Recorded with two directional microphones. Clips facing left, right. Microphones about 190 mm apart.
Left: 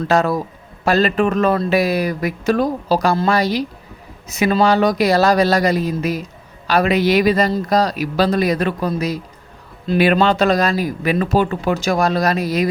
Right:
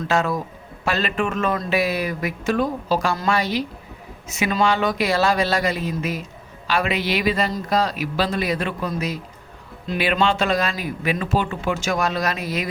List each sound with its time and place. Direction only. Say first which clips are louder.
0.1 s speech: left 5 dB; 35° left (ahead or behind)